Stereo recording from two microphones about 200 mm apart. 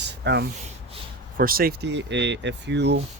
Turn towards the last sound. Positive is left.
turn(degrees=-60)  # may be behind; listen again after turning